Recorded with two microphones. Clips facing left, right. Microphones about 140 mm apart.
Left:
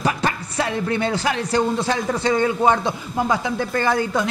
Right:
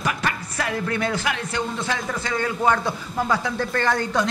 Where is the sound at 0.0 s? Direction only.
30° left (ahead or behind).